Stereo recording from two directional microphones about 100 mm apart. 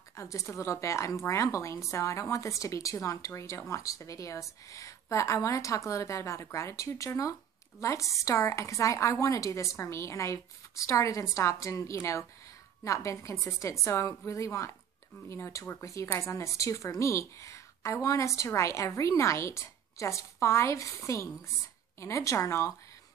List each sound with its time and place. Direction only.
0.1 s a woman's voice: 30° left (ahead or behind)